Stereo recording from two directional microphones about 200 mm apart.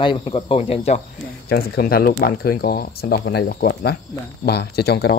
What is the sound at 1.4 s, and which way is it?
Speech, 50° left (ahead or behind).